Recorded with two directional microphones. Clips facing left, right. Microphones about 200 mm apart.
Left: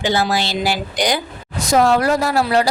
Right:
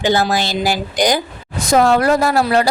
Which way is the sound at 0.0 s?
45° right (ahead or behind).